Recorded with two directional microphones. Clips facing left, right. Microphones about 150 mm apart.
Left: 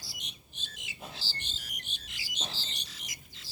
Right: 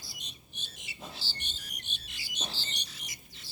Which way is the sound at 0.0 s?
90° left.